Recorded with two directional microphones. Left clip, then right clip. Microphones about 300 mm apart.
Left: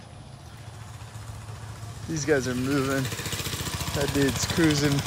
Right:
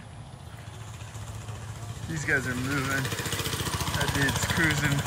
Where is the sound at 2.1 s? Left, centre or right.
Centre.